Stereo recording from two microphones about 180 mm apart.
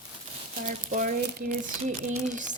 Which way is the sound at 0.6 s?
45° right (ahead or behind).